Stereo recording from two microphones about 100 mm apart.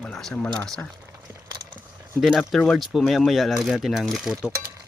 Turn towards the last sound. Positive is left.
turn(degrees=-5)  # may be behind; listen again after turning